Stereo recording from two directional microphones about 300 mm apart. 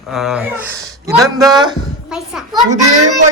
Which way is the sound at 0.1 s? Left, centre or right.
Centre.